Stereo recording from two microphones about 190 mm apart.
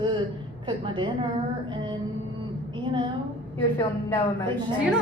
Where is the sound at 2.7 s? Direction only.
25° right (ahead or behind).